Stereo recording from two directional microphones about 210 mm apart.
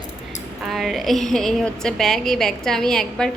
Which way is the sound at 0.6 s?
Centre (ahead or behind).